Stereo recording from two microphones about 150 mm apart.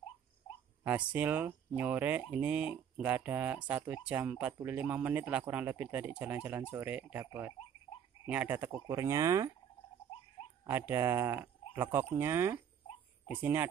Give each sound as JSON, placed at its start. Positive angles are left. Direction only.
{"t": 0.8, "sound": "speech", "side_deg": -10}
{"t": 10.6, "sound": "speech", "side_deg": -15}